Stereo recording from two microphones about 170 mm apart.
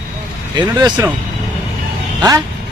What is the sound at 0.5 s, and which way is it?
Speech, 25° right (ahead or behind).